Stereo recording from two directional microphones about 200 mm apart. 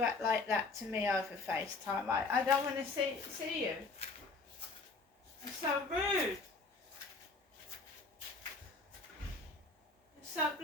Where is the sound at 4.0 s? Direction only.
30° left (ahead or behind).